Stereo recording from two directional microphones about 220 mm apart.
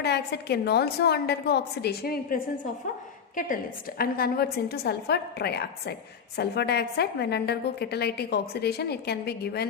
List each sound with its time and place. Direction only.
0.0 s a woman's voice: 50° left (ahead or behind)